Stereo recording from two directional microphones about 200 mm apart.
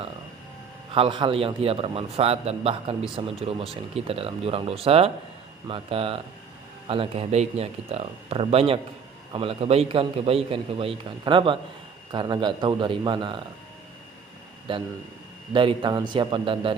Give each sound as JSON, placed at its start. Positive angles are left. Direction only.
{"t": 0.9, "sound": "a man's voice", "side_deg": -25}
{"t": 14.7, "sound": "a man's voice", "side_deg": -25}